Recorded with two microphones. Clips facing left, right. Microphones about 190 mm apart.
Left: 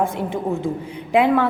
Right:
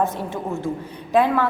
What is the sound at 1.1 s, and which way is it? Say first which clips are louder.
Speech: left 2 dB; 15° left (ahead or behind).